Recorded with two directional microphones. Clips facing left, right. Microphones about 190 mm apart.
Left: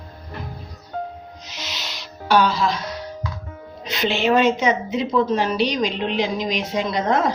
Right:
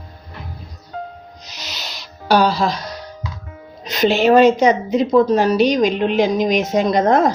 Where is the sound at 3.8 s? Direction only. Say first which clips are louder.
Right 6 dB; 40° right (ahead or behind).